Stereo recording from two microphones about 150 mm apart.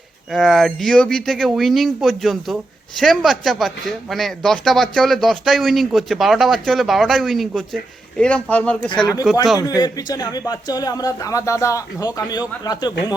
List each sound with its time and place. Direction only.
0.3 s a man's voice: centre (ahead or behind)
9.6 s a man's voice: 25° left (ahead or behind)